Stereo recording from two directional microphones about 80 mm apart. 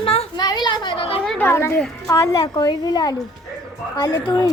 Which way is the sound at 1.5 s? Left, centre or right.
Left.